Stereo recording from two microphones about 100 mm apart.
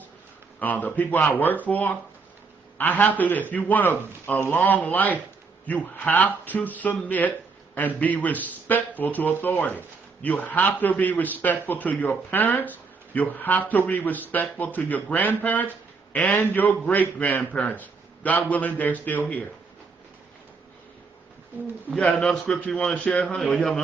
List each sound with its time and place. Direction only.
0.6 s speech: 15° left (ahead or behind)
21.9 s a man's voice: 5° left (ahead or behind)